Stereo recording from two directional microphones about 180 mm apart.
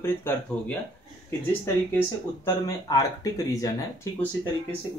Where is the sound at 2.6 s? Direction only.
20° left (ahead or behind).